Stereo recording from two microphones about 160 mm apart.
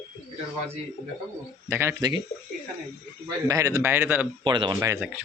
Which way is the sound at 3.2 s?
20° right (ahead or behind).